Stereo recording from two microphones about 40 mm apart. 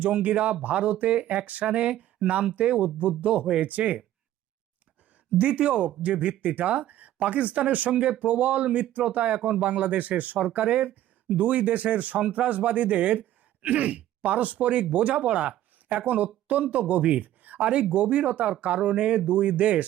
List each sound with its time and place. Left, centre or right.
0.0 s speech: right
5.4 s speech: right
17.2 s a sound: right
17.6 s speech: right